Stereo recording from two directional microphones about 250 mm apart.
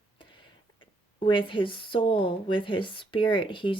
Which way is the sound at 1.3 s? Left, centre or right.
Centre.